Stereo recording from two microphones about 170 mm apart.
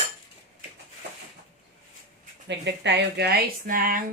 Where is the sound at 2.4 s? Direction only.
90° right; by 4.0 s 55° right (ahead or behind).